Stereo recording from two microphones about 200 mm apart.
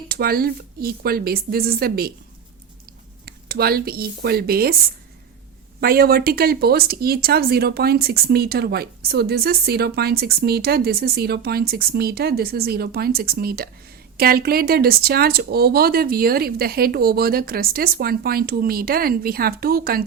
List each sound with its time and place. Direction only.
0.1 s speech: 50° right (ahead or behind)
3.2 s speech: 50° right (ahead or behind)
5.8 s speech: 50° right (ahead or behind)